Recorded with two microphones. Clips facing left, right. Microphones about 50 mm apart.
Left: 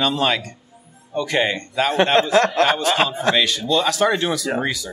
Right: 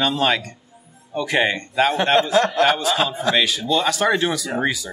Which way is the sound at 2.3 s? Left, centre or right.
Left.